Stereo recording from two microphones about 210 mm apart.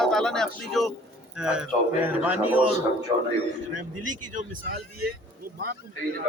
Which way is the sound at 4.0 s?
40° right (ahead or behind).